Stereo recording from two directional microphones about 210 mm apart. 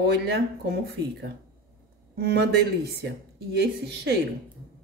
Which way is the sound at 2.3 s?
50° right (ahead or behind).